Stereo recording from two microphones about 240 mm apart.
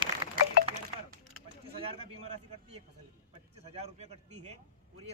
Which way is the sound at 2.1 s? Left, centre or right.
Right.